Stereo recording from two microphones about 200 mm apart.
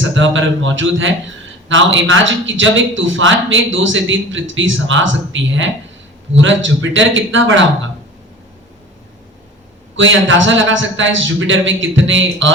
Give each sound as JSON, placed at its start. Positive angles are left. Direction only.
{"t": 0.0, "sound": "a man's voice", "side_deg": -70}
{"t": 9.9, "sound": "a man's voice", "side_deg": -70}